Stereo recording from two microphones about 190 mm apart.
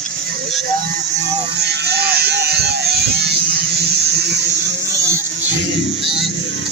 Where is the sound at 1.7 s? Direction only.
60° right (ahead or behind).